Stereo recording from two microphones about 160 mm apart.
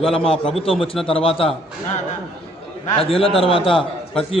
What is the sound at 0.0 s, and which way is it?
Speech, 35° left (ahead or behind).